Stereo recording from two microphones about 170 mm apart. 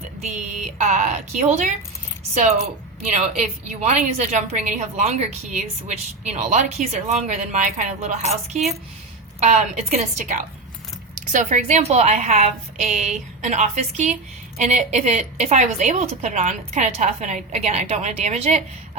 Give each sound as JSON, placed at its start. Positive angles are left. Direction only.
{"t": 0.2, "sound": "a woman's voice", "side_deg": -45}